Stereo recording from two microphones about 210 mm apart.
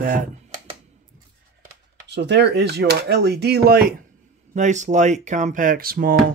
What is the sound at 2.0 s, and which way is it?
Speech, 55° right (ahead or behind).